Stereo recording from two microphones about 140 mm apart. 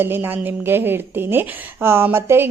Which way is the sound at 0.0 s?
15° right (ahead or behind).